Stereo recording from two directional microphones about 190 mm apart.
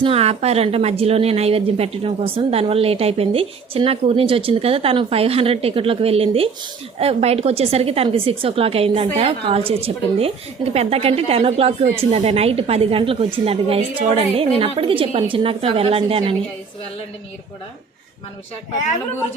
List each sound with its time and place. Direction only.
0.0 s a woman's voice: 30° right (ahead or behind)